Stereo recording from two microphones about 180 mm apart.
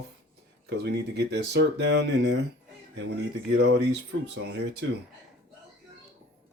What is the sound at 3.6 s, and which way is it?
Speech, 70° right (ahead or behind).